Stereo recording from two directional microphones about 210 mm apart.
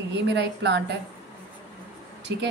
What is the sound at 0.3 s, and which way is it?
Speech, 55° right (ahead or behind).